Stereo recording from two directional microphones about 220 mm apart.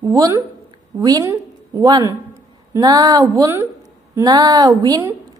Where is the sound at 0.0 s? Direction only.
15° right (ahead or behind).